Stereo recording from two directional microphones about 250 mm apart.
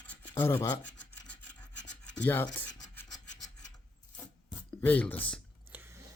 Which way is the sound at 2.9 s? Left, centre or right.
Centre.